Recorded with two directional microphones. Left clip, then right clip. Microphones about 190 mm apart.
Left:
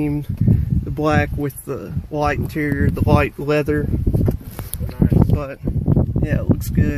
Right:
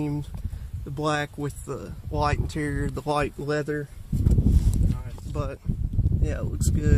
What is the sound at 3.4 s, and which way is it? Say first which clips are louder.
Speech: left 9 dB; 15° left (ahead or behind).